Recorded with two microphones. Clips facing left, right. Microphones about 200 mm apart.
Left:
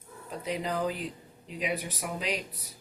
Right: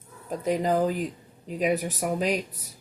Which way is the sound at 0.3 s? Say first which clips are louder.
Right 8 dB; 45° right (ahead or behind).